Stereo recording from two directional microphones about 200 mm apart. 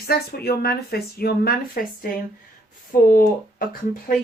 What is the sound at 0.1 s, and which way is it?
Speech, 50° left (ahead or behind).